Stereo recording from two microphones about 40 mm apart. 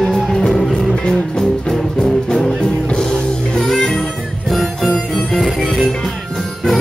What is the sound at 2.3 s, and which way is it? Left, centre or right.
Music, centre.